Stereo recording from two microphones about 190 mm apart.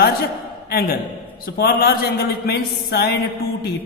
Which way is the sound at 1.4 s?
55° left (ahead or behind).